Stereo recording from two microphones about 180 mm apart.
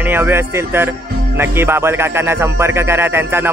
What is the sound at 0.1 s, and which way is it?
A man's voice, 10° right (ahead or behind).